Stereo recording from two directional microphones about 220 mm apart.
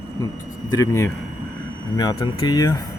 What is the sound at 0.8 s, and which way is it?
Speech, 15° left (ahead or behind).